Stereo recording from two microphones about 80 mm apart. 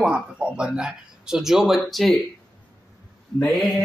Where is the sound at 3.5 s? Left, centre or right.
Centre.